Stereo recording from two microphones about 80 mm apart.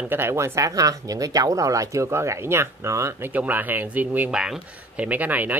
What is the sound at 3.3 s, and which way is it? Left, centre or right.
Speech, right.